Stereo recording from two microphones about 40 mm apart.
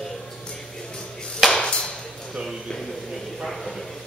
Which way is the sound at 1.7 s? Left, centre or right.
Left.